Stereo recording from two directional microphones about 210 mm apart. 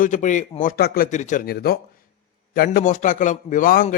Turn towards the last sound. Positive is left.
turn(degrees=40)  # may be behind; listen again after turning